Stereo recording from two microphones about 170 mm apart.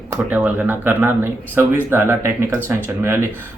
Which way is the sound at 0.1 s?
10° right (ahead or behind).